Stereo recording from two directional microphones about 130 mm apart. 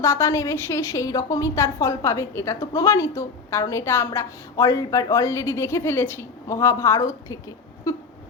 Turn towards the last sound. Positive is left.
turn(degrees=25)  # may be behind; listen again after turning